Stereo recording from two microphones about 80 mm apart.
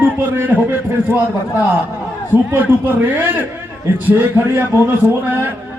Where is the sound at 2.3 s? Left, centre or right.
Right.